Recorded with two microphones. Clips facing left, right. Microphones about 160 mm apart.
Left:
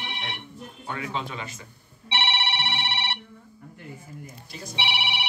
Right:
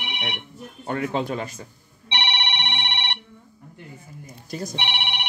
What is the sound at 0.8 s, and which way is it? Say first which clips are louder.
Speech: right 7 dB; 50° right (ahead or behind).